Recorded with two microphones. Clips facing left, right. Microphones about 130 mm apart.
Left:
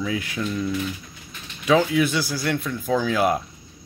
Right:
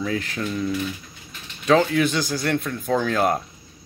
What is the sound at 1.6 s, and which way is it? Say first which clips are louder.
Speech: right 1 dB; 5° left (ahead or behind).